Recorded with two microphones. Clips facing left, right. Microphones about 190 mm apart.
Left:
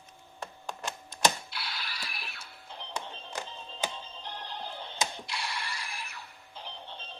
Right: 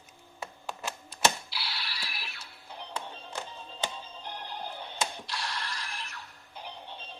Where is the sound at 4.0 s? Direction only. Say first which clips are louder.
Right 1 dB; 10° right (ahead or behind).